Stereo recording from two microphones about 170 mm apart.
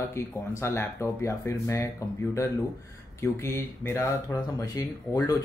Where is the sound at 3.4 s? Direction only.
15° left (ahead or behind).